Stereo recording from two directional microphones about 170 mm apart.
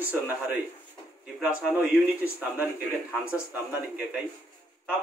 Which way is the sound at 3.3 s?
10° right (ahead or behind).